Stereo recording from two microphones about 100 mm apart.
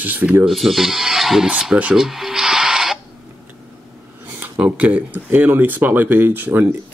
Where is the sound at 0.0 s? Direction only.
15° right (ahead or behind).